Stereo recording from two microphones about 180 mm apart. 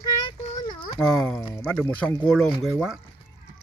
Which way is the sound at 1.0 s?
5° left (ahead or behind).